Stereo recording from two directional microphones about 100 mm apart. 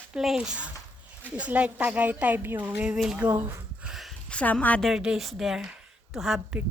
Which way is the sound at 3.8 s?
5° right (ahead or behind).